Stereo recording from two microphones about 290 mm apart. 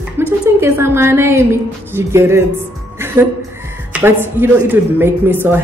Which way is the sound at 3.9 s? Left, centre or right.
Centre.